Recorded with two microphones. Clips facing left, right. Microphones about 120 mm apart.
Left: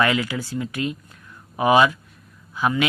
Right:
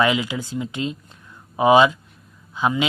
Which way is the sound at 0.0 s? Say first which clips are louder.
Right 1 dB; 20° right (ahead or behind).